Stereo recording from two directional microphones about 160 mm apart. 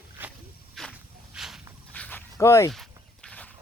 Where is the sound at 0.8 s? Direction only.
Centre (ahead or behind).